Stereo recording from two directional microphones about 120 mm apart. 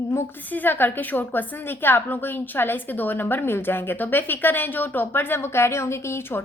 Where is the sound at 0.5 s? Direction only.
15° left (ahead or behind).